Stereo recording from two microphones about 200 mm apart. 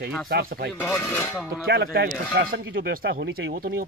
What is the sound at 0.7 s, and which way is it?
Speech, 10° left (ahead or behind).